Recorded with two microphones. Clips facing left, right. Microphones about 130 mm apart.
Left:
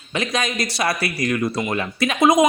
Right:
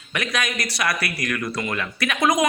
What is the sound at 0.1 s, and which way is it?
A woman's voice, 25° left (ahead or behind).